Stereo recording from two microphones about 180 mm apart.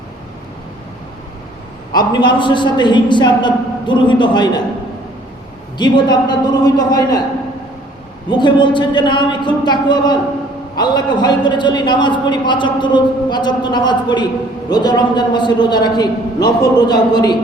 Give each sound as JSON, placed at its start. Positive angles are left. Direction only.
{"t": 1.9, "sound": "a man's voice", "side_deg": 25}
{"t": 5.7, "sound": "a man's voice", "side_deg": 25}
{"t": 8.3, "sound": "a man's voice", "side_deg": 25}